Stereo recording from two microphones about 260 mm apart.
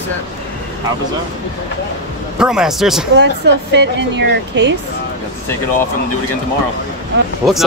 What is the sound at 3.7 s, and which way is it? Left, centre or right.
Speech, right.